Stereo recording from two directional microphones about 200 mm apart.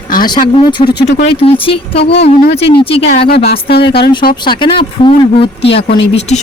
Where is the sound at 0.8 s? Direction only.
55° left (ahead or behind).